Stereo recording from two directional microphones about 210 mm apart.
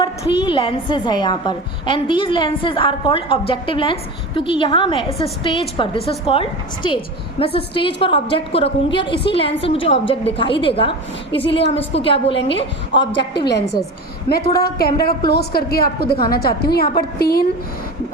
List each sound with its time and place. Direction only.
0.0 s a woman's voice: 25° left (ahead or behind)
14.3 s a woman's voice: 50° left (ahead or behind)